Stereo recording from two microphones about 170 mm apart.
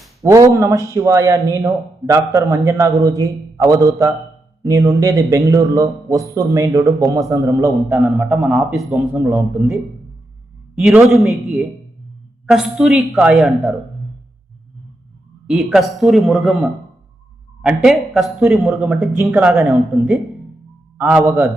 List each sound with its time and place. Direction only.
0.2 s a man's voice: 20° right (ahead or behind)
8.3 s a man's voice: centre (ahead or behind)
10.8 s a man's voice: centre (ahead or behind)
15.4 s a man's voice: 5° right (ahead or behind)
21.0 s a man's voice: 15° right (ahead or behind)